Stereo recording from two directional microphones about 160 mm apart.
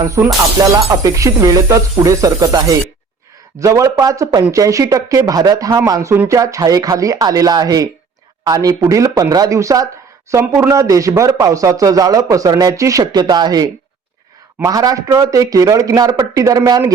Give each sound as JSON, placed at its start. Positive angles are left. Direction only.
{"t": 0.0, "sound": "speech", "side_deg": -20}